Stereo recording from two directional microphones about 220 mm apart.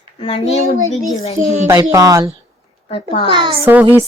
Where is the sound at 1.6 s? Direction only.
15° right (ahead or behind).